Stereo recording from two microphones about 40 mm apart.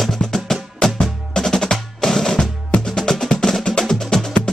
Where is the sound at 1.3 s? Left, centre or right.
Centre.